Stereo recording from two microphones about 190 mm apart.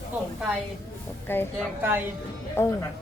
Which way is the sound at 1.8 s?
10° right (ahead or behind).